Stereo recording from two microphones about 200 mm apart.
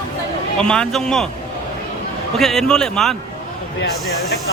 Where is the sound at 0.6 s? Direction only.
5° left (ahead or behind).